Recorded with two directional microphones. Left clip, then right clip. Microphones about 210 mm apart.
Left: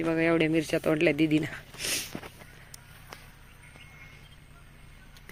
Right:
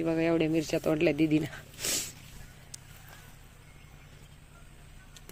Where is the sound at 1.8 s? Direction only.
25° right (ahead or behind).